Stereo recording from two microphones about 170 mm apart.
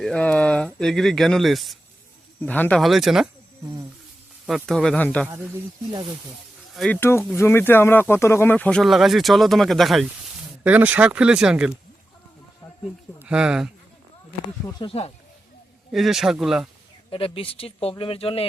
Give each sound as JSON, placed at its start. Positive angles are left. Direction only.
{"t": 0.0, "sound": "speech", "side_deg": 5}
{"t": 4.4, "sound": "speech", "side_deg": 0}
{"t": 6.7, "sound": "speech", "side_deg": 5}
{"t": 13.1, "sound": "speech", "side_deg": -5}
{"t": 14.7, "sound": "speech", "side_deg": 30}
{"t": 15.9, "sound": "speech", "side_deg": 0}
{"t": 17.1, "sound": "speech", "side_deg": 35}